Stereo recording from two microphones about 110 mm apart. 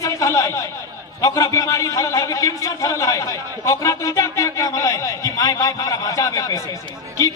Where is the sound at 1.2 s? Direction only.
30° left (ahead or behind).